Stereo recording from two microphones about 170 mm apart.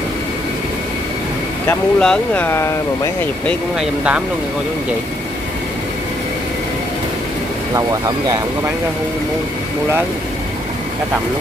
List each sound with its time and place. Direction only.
1.7 s speech: 5° left (ahead or behind)
7.7 s speech: 20° right (ahead or behind)